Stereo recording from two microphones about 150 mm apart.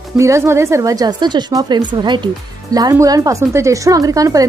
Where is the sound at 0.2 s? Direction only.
20° right (ahead or behind).